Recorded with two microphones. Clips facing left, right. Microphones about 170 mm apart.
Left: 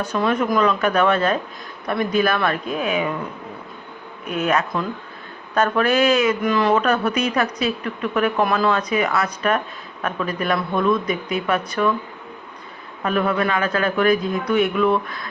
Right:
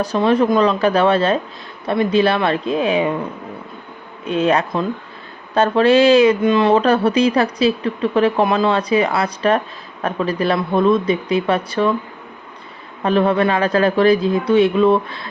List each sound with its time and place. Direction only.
0.0 s speech: 30° right (ahead or behind)
4.3 s speech: 30° right (ahead or behind)
13.0 s speech: 30° right (ahead or behind)